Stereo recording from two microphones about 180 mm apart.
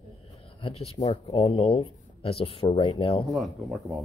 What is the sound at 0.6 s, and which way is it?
Speech, 30° left (ahead or behind).